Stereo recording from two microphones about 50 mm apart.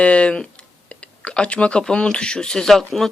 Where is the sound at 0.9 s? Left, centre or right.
Left.